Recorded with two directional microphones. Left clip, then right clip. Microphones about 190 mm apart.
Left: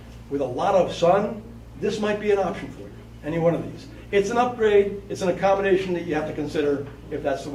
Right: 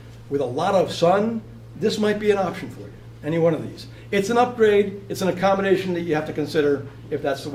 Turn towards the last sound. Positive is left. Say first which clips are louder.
# right 1 dB
turn(degrees=-30)  # may be behind; listen again after turning